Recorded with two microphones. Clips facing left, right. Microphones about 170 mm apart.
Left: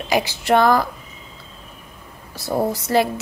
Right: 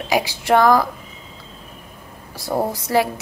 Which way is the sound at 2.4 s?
15° right (ahead or behind).